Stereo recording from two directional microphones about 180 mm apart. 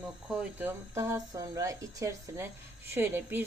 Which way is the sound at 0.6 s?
15° right (ahead or behind).